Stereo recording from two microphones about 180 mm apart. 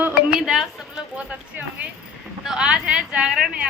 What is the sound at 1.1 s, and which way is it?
Speech, 10° right (ahead or behind).